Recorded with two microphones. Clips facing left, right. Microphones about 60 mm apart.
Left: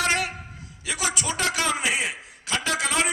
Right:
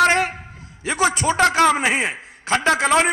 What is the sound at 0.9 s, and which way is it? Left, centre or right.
A man's voice, right.